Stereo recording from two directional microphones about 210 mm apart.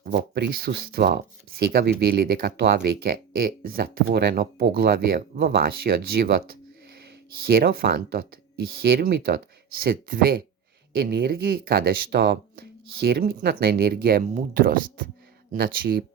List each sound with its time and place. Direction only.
0.0 s speech: 50° right (ahead or behind)